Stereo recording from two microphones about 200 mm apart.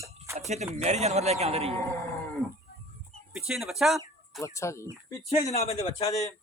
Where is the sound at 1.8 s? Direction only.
15° left (ahead or behind).